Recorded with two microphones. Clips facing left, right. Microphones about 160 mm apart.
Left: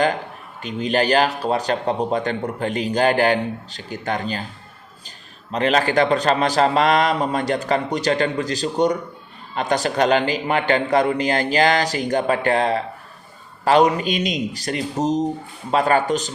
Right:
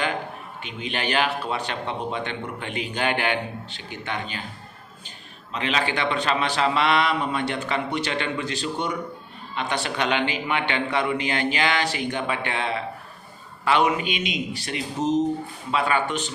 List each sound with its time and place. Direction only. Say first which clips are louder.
0.6 s a man's voice: left 10 dB; 40° left (ahead or behind)